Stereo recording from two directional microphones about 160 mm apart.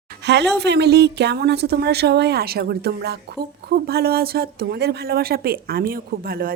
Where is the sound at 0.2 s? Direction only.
90° right.